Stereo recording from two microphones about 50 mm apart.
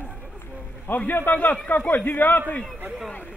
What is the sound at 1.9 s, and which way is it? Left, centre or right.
Speech, left.